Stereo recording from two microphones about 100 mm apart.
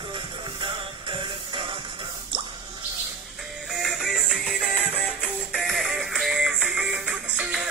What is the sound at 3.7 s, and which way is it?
Music, centre (ahead or behind).